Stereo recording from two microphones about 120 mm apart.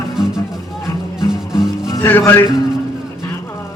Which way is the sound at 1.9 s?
20° left (ahead or behind).